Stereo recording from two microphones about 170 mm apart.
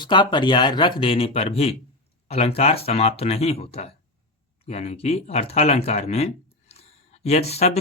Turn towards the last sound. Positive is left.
turn(degrees=40)  # may be behind; listen again after turning